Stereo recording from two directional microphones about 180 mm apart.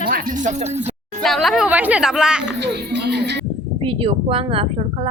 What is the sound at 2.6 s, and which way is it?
Music, 70° right (ahead or behind).